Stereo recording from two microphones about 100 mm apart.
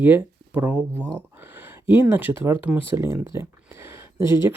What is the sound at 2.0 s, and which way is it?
Speech, 20° right (ahead or behind).